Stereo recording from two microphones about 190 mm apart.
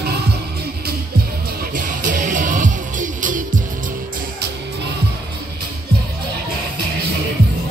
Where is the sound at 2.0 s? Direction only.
40° right (ahead or behind).